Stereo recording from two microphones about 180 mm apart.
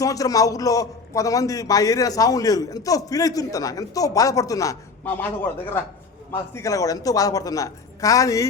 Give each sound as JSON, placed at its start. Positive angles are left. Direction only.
{"t": 0.0, "sound": "a man's voice", "side_deg": 20}
{"t": 6.3, "sound": "a man's voice", "side_deg": 15}